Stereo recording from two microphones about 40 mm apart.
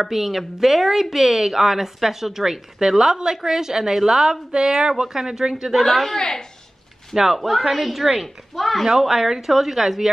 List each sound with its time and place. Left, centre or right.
0.0 s speech: centre
5.8 s speech: centre
6.1 s a woman's voice: centre
7.3 s speech: centre
8.8 s speech: centre